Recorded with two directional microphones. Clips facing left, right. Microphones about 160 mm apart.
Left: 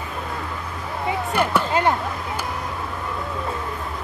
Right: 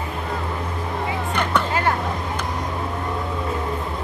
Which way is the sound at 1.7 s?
20° left (ahead or behind).